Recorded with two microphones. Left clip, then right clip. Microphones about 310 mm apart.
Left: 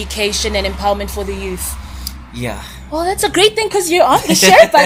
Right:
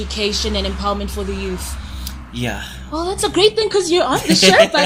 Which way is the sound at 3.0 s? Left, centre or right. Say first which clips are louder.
Left 3 dB; left.